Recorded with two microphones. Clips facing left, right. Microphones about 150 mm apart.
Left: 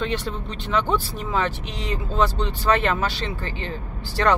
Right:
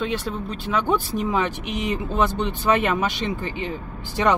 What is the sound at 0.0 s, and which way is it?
Speech, 5° right (ahead or behind).